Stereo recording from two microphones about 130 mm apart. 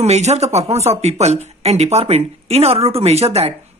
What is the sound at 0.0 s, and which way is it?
Speech, 55° right (ahead or behind).